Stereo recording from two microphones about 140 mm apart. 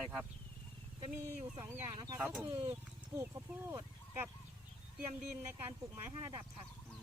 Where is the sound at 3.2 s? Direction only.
20° right (ahead or behind).